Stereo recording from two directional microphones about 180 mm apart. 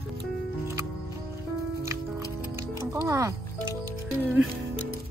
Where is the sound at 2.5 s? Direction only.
15° right (ahead or behind).